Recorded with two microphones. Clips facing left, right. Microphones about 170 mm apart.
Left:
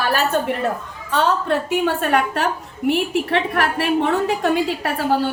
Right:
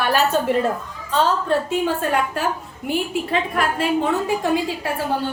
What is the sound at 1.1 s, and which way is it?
A woman's voice, 70° left (ahead or behind).